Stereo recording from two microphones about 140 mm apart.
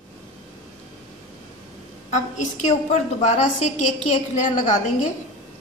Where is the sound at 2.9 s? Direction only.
55° left (ahead or behind).